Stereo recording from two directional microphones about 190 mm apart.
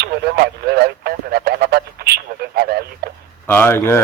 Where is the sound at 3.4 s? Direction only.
10° left (ahead or behind).